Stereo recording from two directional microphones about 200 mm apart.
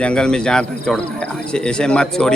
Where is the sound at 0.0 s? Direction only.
5° left (ahead or behind).